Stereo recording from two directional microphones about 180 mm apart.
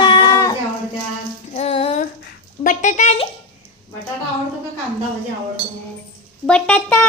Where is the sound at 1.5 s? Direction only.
35° left (ahead or behind).